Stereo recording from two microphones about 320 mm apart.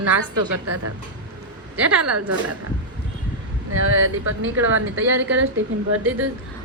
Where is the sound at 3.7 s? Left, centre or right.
Right.